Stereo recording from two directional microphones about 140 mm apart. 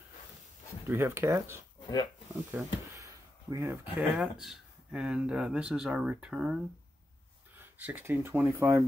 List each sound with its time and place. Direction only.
0.8 s speech: 15° right (ahead or behind)
1.8 s dog: 30° left (ahead or behind)
2.5 s a sound: 20° right (ahead or behind)
3.8 s speech: 5° right (ahead or behind)